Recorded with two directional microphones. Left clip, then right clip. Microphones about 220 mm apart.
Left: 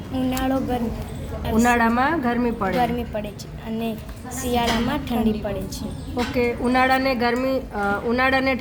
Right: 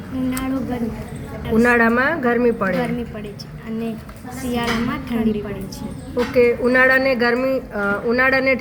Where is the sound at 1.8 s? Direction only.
10° right (ahead or behind).